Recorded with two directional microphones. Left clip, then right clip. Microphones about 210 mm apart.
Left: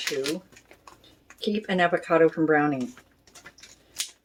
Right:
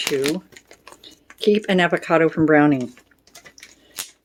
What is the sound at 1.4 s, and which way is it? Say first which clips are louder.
Speech: right 7 dB; 45° right (ahead or behind).